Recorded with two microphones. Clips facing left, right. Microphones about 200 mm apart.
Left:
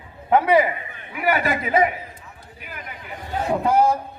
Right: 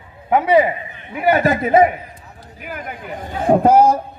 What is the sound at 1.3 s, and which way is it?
Speech, 45° right (ahead or behind).